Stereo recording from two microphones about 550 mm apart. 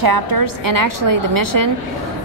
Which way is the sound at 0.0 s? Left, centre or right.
Right.